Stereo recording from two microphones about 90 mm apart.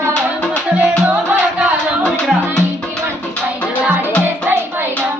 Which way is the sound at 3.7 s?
20° right (ahead or behind).